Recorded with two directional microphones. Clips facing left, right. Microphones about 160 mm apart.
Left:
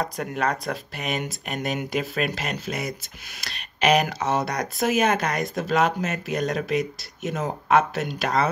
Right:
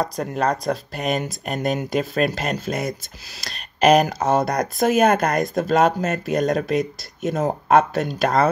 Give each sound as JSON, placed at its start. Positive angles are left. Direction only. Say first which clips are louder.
{"t": 0.0, "sound": "speech", "louder": "right 4 dB", "side_deg": -35}